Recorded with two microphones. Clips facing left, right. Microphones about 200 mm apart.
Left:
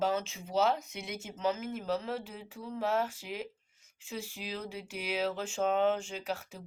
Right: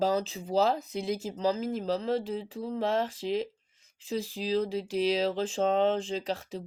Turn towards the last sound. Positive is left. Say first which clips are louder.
# right 5 dB
turn(degrees=-30)  # may be behind; listen again after turning